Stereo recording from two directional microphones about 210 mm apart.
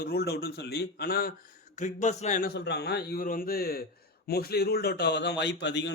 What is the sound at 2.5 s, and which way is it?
A man's voice, 55° left (ahead or behind).